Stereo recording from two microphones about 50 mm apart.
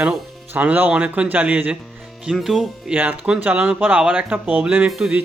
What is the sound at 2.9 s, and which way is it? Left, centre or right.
Speech, centre.